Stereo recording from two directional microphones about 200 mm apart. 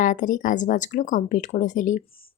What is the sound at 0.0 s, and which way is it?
Speech, 40° left (ahead or behind).